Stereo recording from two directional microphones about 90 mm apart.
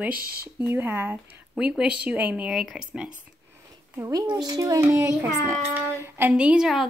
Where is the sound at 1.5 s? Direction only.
10° right (ahead or behind).